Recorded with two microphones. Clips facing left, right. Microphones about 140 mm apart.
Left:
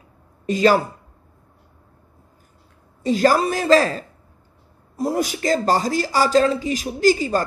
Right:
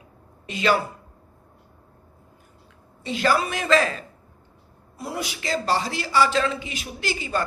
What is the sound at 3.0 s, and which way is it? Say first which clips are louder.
Speech: left 6 dB; 40° left (ahead or behind).